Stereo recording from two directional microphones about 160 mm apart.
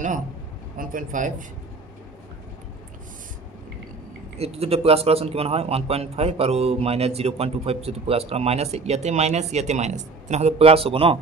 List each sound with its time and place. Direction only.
0.7 s speech: 55° right (ahead or behind)
4.4 s a man's voice: 40° right (ahead or behind)